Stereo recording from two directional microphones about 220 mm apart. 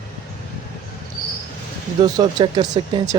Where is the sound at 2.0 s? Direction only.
20° right (ahead or behind).